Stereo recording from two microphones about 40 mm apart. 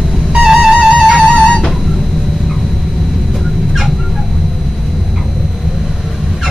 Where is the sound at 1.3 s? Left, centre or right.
Left.